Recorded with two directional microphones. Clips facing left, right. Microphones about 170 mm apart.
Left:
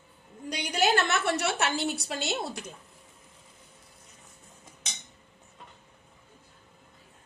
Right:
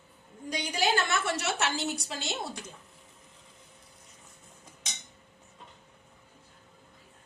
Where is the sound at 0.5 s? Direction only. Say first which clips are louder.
Left 3 dB; 65° left (ahead or behind).